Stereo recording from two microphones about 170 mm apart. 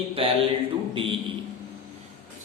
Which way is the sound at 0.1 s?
30° right (ahead or behind).